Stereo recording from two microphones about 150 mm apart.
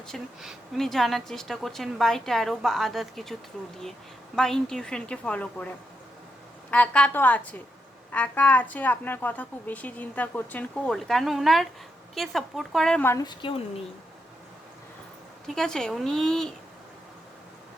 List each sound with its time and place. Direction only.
0.1 s a woman's voice: centre (ahead or behind)
4.4 s a woman's voice: 5° left (ahead or behind)
6.7 s a woman's voice: 10° left (ahead or behind)
13.1 s a woman's voice: 25° left (ahead or behind)
15.4 s a woman's voice: 5° left (ahead or behind)